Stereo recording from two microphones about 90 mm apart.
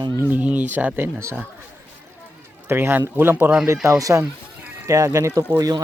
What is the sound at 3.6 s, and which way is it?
Speech, 35° right (ahead or behind).